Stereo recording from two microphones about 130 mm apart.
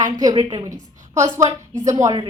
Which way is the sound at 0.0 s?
30° right (ahead or behind).